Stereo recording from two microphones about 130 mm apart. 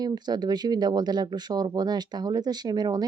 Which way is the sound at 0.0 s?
30° right (ahead or behind).